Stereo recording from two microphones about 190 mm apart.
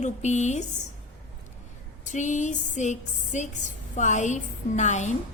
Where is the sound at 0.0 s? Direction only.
40° left (ahead or behind).